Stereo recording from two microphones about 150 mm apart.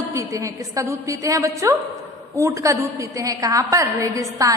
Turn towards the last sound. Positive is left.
turn(degrees=-20)  # may be behind; listen again after turning